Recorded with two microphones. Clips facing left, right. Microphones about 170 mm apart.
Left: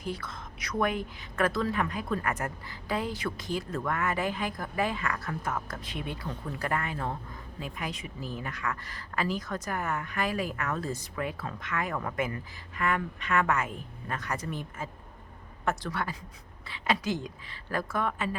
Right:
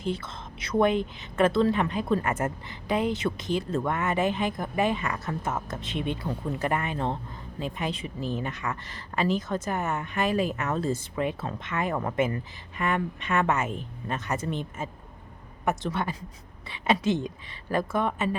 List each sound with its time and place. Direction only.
0.0 s speech: 25° right (ahead or behind)